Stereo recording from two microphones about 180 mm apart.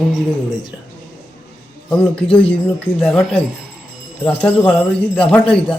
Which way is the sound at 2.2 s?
30° left (ahead or behind).